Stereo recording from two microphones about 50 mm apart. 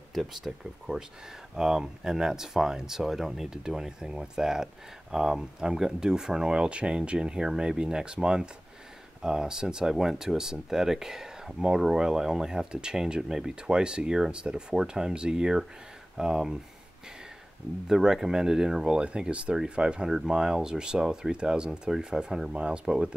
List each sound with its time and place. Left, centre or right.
0.1 s speech: centre
17.8 s speech: centre